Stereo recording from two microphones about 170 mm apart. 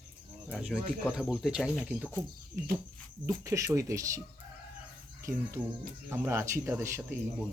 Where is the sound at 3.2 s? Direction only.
20° right (ahead or behind).